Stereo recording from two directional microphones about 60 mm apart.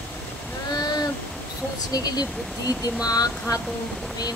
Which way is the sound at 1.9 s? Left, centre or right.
Left.